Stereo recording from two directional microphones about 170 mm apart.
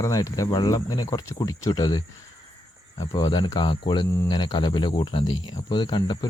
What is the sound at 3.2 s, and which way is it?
Speech, 25° left (ahead or behind).